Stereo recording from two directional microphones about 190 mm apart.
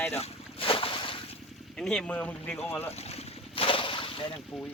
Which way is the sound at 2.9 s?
35° left (ahead or behind).